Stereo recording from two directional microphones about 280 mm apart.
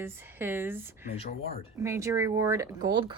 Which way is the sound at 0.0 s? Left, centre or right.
Centre.